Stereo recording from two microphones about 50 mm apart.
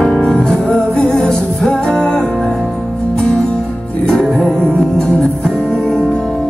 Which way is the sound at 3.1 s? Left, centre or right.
Centre.